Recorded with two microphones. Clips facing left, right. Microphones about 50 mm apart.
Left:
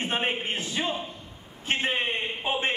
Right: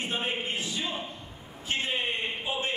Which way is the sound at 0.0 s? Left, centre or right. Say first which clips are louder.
Left 3 dB; left.